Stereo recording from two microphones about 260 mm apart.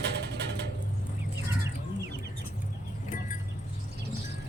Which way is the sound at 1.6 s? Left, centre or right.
Right.